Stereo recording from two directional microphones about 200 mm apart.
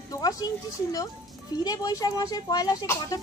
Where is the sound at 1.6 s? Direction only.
20° left (ahead or behind).